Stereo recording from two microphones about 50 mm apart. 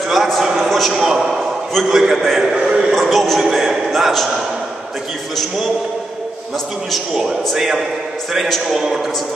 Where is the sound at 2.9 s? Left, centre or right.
Centre.